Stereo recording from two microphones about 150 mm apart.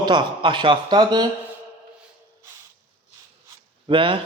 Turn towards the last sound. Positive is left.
turn(degrees=-35)  # may be behind; listen again after turning